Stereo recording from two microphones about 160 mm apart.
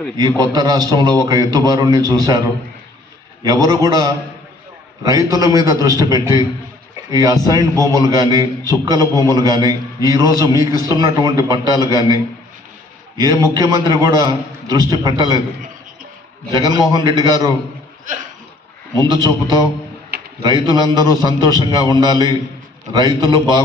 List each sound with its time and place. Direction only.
0.4 s a man's voice: 25° right (ahead or behind)
3.4 s a man's voice: 25° right (ahead or behind)
13.2 s a man's voice: 25° right (ahead or behind)
16.4 s a man's voice: 25° right (ahead or behind)
19.2 s a man's voice: 25° right (ahead or behind)
20.1 s a sound: 80° right
20.4 s a man's voice: 25° right (ahead or behind)